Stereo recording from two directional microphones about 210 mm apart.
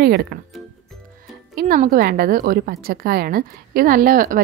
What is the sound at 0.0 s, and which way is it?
Speech, 50° right (ahead or behind).